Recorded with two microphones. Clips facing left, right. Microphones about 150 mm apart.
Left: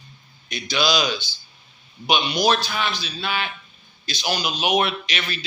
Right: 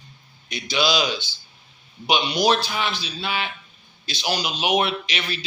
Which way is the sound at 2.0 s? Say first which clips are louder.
Even; 30° right (ahead or behind).